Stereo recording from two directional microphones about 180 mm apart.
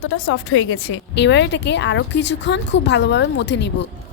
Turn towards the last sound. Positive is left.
turn(degrees=75)  # may be behind; listen again after turning